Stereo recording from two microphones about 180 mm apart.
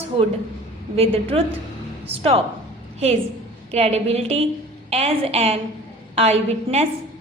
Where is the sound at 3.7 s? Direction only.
35° right (ahead or behind).